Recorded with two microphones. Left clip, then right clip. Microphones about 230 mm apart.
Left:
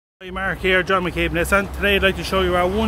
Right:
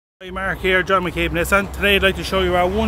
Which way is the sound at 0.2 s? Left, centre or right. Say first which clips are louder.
Even; centre.